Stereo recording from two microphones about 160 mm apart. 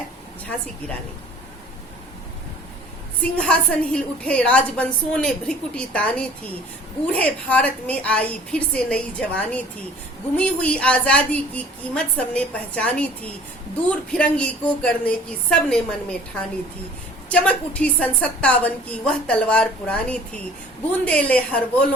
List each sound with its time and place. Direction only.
3.3 s a woman's voice: 5° left (ahead or behind)
17.2 s a woman's voice: 10° left (ahead or behind)